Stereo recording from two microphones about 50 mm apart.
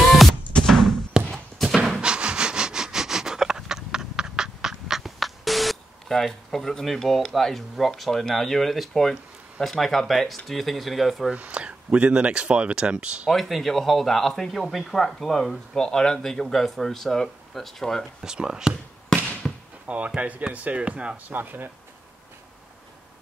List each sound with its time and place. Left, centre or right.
0.7 s a sound: centre
2.0 s sniff: centre
7.2 s a man's voice: centre
11.3 s speech: right
13.3 s a man's voice: centre
18.2 s speech: centre
19.4 s basketball bounce: centre
20.2 s speech: right
21.3 s speech: right